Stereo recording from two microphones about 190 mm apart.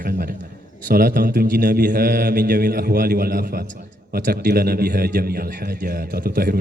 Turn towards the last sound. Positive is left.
turn(degrees=-50)  # may be behind; listen again after turning